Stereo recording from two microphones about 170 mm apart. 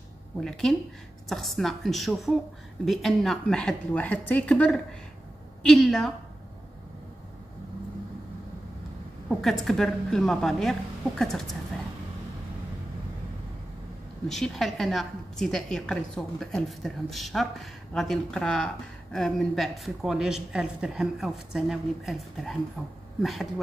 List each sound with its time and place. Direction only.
0.4 s a woman's voice: 5° left (ahead or behind)
9.4 s a woman's voice: centre (ahead or behind)
14.2 s a woman's voice: centre (ahead or behind)